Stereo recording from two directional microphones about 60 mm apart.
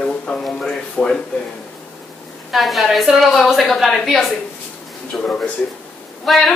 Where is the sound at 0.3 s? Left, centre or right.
Centre.